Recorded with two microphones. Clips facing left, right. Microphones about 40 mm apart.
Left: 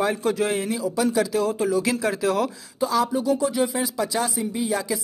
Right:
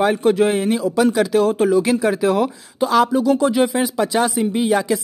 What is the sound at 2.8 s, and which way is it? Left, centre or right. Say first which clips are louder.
Speech: right 6 dB; right.